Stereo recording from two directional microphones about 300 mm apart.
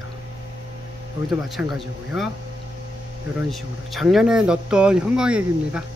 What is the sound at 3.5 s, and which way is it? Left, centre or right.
Speech, centre.